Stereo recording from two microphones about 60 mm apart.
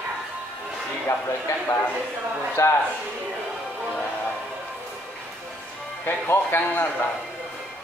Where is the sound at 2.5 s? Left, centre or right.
Left.